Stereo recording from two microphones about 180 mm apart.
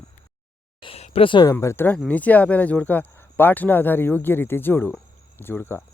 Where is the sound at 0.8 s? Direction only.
35° left (ahead or behind).